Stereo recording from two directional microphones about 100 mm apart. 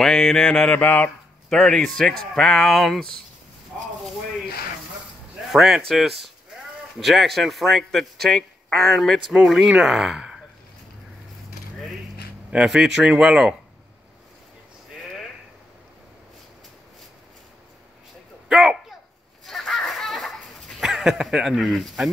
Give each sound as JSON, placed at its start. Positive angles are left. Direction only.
{"t": 0.0, "sound": "mantra", "side_deg": 5}
{"t": 0.7, "sound": "speech", "side_deg": 20}
{"t": 5.5, "sound": "speech", "side_deg": -5}
{"t": 12.4, "sound": "a man's voice", "side_deg": -10}
{"t": 18.5, "sound": "a sound", "side_deg": -5}